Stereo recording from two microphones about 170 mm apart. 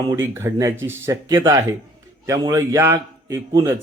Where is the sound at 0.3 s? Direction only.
15° right (ahead or behind).